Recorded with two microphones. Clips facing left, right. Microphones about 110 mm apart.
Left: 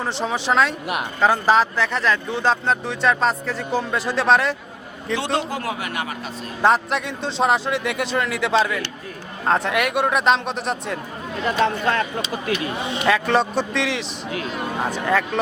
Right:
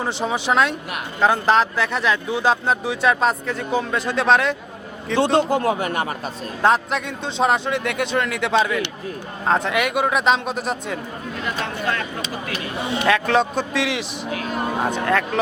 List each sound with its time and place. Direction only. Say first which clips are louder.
0.0 s speech: right 1 dB; centre (ahead or behind)
5.1 s a man's voice: right 6 dB; 35° right (ahead or behind)
6.6 s speech: even; centre (ahead or behind)
11.6 s speech: left 6 dB; 35° left (ahead or behind)
13.1 s speech: even; centre (ahead or behind)